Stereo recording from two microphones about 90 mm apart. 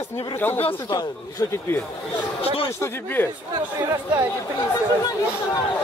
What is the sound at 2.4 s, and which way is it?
Speech, 90° left.